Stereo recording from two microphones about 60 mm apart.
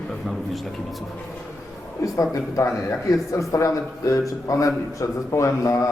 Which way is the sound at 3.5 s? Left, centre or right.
Left.